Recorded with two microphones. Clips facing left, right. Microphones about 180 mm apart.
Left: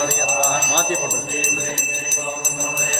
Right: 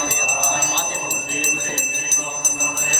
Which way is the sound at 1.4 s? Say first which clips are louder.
Left 1 dB; 20° left (ahead or behind).